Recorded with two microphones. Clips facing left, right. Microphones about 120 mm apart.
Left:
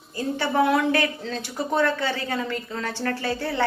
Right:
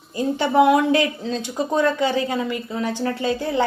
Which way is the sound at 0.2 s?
15° right (ahead or behind).